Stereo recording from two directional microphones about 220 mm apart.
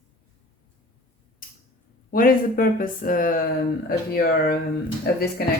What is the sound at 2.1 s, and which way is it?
Speech, 40° left (ahead or behind).